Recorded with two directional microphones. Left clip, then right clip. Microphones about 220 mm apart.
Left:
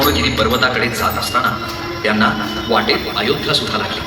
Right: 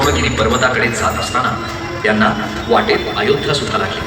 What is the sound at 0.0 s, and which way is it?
Speech, 35° left (ahead or behind).